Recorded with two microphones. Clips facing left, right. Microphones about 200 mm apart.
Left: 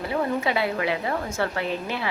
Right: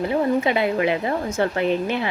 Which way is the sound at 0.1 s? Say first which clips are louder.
Right 3 dB; 20° right (ahead or behind).